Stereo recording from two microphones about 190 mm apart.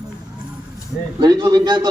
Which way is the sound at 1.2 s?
20° right (ahead or behind).